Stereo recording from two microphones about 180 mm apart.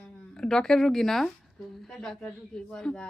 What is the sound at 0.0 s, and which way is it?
Speech, 5° left (ahead or behind).